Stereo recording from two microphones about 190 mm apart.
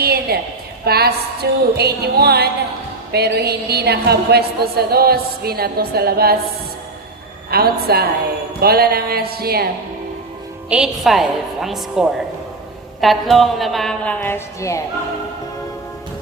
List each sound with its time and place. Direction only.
0.0 s a sound: 55° right (ahead or behind)
0.9 s a woman's voice: 55° right (ahead or behind)
7.5 s a woman's voice: 55° right (ahead or behind)
10.7 s a woman's voice: 5° right (ahead or behind); by 14.8 s 15° left (ahead or behind)